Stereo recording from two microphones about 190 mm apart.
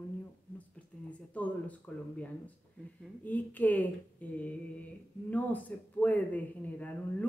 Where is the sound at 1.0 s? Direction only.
5° left (ahead or behind).